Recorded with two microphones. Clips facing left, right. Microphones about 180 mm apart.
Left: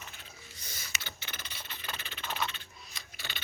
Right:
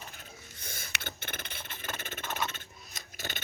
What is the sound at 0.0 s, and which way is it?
Mechanisms, 45° right (ahead or behind).